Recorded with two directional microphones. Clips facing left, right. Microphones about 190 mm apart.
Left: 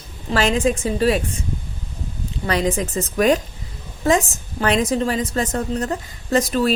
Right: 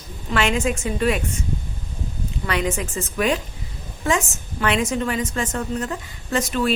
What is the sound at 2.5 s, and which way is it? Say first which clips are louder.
A woman's voice: left 4 dB; 35° left (ahead or behind).